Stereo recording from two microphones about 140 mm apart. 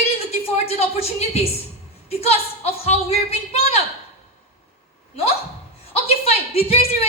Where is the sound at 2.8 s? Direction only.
50° left (ahead or behind).